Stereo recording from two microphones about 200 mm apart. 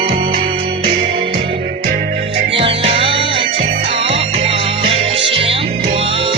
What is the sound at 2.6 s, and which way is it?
Music, 30° right (ahead or behind).